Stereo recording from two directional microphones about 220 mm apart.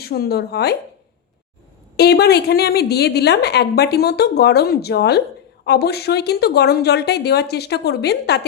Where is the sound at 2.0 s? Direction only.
45° left (ahead or behind).